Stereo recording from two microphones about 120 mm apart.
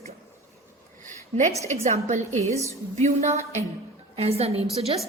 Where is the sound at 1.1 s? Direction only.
80° right.